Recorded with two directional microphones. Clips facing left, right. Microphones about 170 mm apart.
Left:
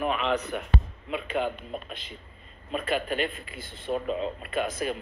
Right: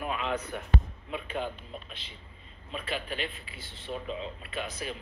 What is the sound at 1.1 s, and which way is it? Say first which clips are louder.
A woman's voice: left 6 dB; 80° left.